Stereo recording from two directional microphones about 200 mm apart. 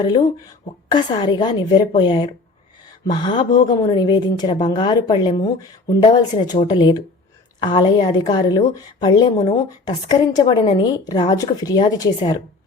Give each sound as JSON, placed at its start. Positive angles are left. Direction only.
{"t": 0.9, "sound": "a woman's voice", "side_deg": 20}